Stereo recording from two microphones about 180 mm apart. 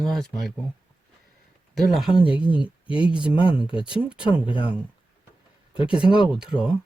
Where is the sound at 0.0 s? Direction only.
Centre (ahead or behind).